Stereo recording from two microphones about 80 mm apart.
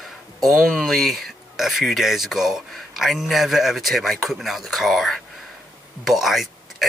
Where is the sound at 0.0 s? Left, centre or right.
Centre.